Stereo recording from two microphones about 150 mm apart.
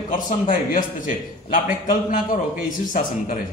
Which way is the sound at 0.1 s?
60° left (ahead or behind).